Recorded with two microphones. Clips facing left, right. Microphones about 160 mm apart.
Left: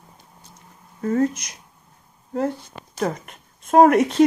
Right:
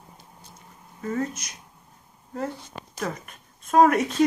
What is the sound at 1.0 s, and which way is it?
Speech, 45° left (ahead or behind).